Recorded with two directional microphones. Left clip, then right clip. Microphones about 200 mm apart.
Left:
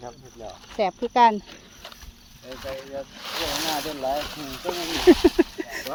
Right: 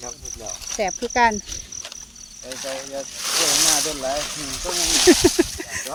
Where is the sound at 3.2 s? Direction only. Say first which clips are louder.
Right 8 dB; 55° right (ahead or behind).